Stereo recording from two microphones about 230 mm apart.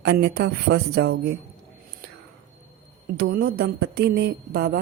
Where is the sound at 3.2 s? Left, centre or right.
Right.